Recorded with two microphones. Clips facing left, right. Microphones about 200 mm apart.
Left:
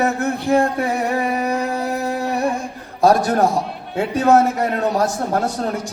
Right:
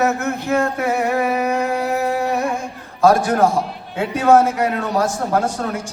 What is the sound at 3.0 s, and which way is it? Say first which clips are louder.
A man's voice: right 1 dB; 35° left (ahead or behind).